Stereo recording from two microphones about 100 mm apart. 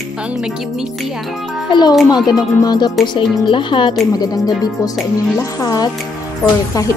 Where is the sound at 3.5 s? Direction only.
55° left (ahead or behind).